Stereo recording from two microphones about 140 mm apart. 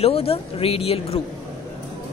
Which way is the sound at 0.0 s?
45° left (ahead or behind).